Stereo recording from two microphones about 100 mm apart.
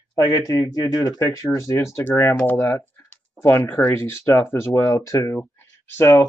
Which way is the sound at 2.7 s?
20° left (ahead or behind).